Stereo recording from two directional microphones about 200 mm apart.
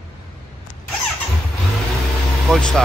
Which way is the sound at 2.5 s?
5° left (ahead or behind).